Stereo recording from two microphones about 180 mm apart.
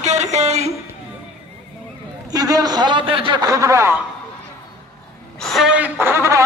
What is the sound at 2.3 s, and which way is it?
A man's voice, 20° right (ahead or behind).